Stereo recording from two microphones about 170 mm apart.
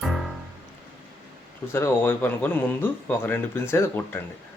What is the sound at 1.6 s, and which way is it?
Speech, 15° left (ahead or behind).